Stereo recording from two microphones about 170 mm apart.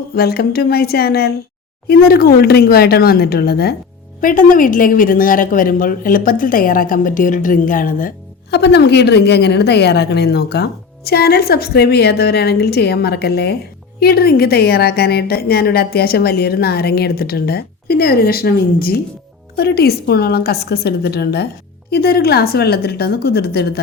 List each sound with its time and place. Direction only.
0.2 s a woman's voice: 65° left (ahead or behind)
4.2 s speech: 55° left (ahead or behind)
8.4 s a woman's voice: 80° left